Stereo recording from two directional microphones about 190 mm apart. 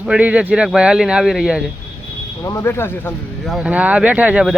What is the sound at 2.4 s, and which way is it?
Speech, 15° left (ahead or behind).